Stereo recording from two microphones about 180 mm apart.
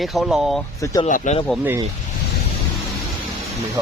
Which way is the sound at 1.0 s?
45° left (ahead or behind).